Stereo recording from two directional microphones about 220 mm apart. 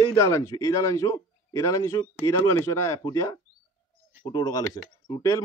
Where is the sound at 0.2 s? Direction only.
15° left (ahead or behind).